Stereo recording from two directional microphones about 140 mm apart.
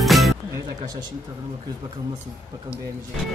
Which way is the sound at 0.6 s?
30° right (ahead or behind).